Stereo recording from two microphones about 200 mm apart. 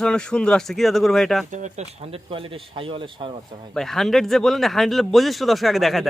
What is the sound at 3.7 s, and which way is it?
Speech, centre (ahead or behind).